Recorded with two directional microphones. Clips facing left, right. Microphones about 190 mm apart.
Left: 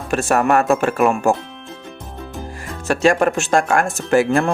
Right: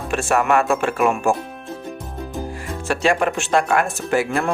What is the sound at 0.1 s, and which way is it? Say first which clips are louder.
Speech: left 2 dB; 40° left (ahead or behind).